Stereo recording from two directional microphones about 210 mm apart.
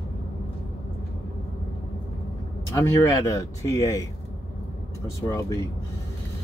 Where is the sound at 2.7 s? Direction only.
15° left (ahead or behind).